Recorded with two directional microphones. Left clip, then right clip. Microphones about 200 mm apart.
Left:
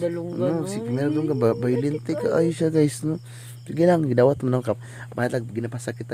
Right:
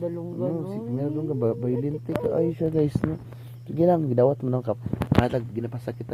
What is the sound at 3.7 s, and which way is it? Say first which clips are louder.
Speech: left 2 dB; 15° left (ahead or behind).